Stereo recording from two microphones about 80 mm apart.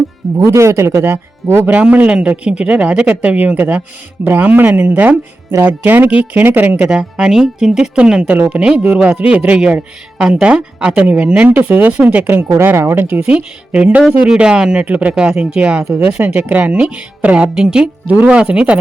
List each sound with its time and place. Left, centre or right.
0.4 s speech: right
1.7 s a man's voice: centre
15.1 s a man's voice: centre